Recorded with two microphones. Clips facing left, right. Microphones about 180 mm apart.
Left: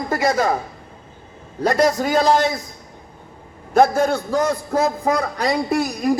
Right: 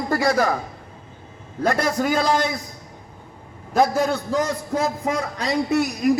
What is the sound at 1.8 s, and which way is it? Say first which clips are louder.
Speech: left 7 dB; 40° left (ahead or behind).